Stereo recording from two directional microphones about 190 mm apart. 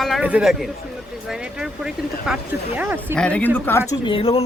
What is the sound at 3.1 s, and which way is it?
Speech, 5° left (ahead or behind).